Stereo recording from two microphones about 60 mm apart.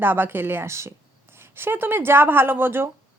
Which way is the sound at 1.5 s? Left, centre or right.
Right.